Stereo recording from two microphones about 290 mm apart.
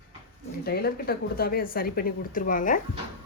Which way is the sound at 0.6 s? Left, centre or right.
Left.